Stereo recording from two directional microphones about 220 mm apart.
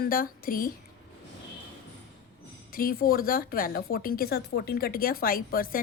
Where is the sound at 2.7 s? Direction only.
40° left (ahead or behind).